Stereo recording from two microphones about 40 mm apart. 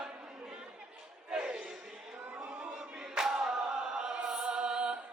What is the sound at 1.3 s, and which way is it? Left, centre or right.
Battle cry, right.